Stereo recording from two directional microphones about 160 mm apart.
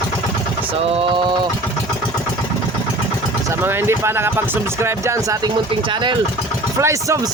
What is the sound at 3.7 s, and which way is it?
Speech, 15° right (ahead or behind).